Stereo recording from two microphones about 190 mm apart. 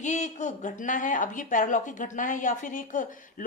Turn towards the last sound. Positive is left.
turn(degrees=45)  # may be behind; listen again after turning